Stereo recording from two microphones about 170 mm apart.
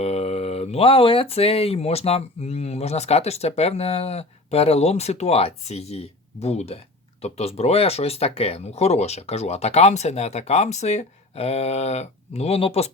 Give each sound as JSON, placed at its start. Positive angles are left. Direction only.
{"t": 0.0, "sound": "speech", "side_deg": 35}